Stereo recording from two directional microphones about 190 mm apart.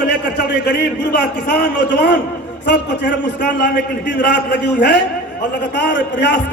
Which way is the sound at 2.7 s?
60° left (ahead or behind).